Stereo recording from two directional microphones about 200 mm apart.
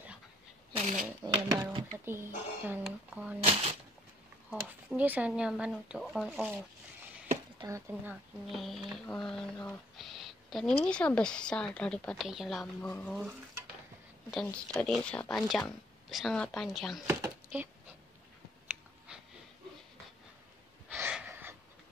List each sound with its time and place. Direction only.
0.7 s speech: 40° right (ahead or behind)
1.2 s a sound: 20° right (ahead or behind)
2.0 s speech: 10° right (ahead or behind)
4.5 s speech: 10° right (ahead or behind)
7.6 s speech: 15° right (ahead or behind)
8.5 s speech: centre (ahead or behind)
12.8 s speech: 10° left (ahead or behind)
17.1 s a sound: 10° right (ahead or behind)
20.9 s a sound: 10° right (ahead or behind)